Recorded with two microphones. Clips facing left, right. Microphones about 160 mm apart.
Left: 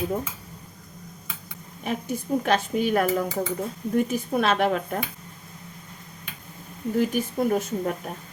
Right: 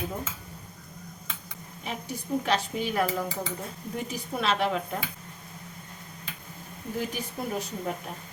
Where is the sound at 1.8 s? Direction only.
50° left (ahead or behind).